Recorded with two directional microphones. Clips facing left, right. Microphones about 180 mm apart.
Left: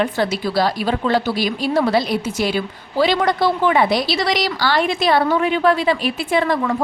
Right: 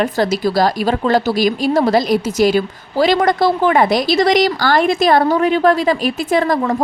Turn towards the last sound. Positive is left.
turn(degrees=-40)  # may be behind; listen again after turning